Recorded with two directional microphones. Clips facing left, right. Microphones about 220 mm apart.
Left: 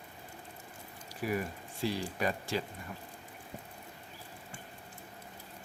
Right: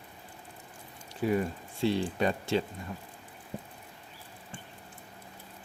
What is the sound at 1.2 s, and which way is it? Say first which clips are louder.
Speech: right 6 dB; 25° right (ahead or behind).